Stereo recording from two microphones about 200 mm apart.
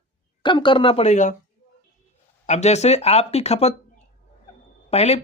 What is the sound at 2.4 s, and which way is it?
Speech, 35° left (ahead or behind).